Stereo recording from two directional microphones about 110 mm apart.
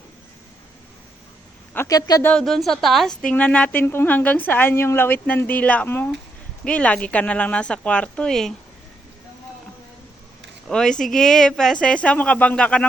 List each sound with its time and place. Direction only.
1.9 s speech: 35° left (ahead or behind)
2.4 s a woman's voice: centre (ahead or behind)
10.7 s a woman's voice: 5° left (ahead or behind)